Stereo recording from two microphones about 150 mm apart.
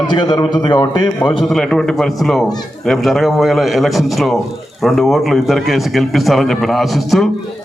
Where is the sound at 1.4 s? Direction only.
Centre (ahead or behind).